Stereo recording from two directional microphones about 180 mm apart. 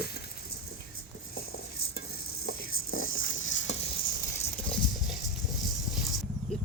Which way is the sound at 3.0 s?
90° left.